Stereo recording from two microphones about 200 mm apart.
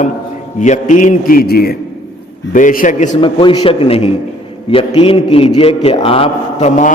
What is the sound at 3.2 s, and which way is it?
A man's voice, 25° left (ahead or behind).